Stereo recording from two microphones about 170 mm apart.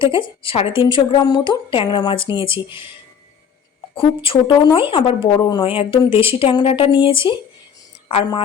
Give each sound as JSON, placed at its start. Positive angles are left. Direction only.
{"t": 0.0, "sound": "a woman's voice", "side_deg": 30}
{"t": 3.9, "sound": "a woman's voice", "side_deg": 30}